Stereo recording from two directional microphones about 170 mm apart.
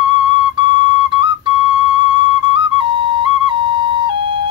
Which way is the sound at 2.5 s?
30° right (ahead or behind).